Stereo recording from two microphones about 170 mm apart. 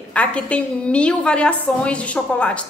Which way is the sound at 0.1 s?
5° left (ahead or behind).